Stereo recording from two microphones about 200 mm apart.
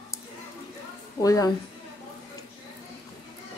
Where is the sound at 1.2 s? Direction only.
15° left (ahead or behind).